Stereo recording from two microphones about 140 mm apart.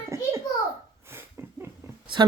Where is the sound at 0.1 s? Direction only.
20° right (ahead or behind).